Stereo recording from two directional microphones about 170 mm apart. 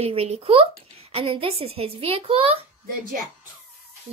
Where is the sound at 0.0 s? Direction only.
35° right (ahead or behind).